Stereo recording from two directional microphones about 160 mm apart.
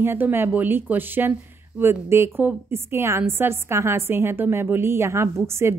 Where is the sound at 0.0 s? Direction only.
15° right (ahead or behind).